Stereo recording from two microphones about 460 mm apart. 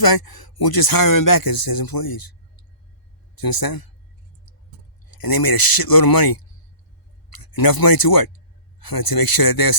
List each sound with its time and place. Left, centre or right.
0.0 s speech: left
3.3 s speech: left
5.0 s speech: left